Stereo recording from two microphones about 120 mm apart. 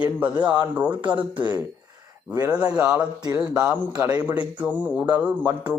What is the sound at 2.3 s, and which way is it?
Speech, 35° right (ahead or behind).